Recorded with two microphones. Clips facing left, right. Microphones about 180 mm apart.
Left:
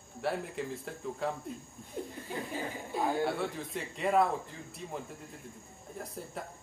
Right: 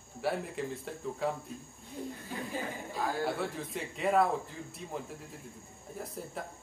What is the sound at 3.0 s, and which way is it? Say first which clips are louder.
Speech: left 3 dB; 20° left (ahead or behind).